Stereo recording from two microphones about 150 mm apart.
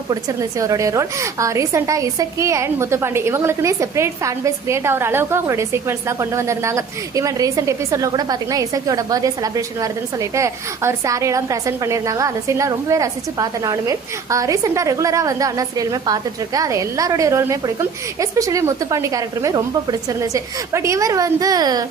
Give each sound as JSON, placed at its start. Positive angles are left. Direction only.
{"t": 0.1, "sound": "a woman's voice", "side_deg": -25}